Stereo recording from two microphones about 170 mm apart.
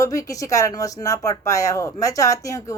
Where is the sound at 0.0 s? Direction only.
20° left (ahead or behind).